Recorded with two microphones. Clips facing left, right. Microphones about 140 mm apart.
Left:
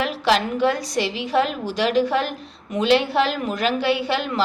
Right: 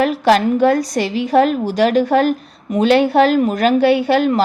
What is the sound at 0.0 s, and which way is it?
A woman's voice, 45° right (ahead or behind).